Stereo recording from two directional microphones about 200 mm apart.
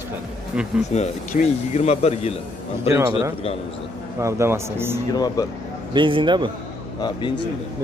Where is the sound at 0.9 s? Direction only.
35° left (ahead or behind).